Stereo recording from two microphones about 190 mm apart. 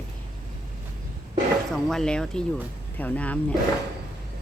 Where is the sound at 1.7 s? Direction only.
Centre (ahead or behind).